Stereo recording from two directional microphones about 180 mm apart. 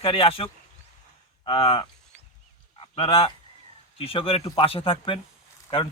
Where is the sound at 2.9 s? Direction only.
35° left (ahead or behind).